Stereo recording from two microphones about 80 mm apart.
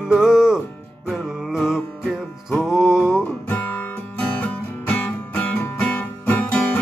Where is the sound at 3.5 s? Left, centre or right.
Left.